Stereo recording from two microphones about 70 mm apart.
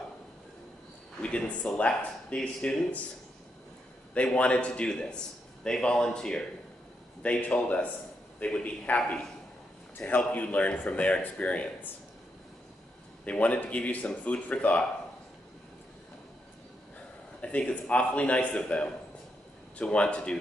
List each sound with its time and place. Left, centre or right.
1.2 s a man's voice: centre
4.1 s a man's voice: centre
13.2 s a man's voice: centre
17.4 s a man's voice: centre